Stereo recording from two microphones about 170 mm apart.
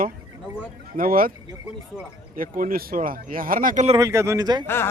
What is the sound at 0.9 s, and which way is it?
Speech, 55° right (ahead or behind).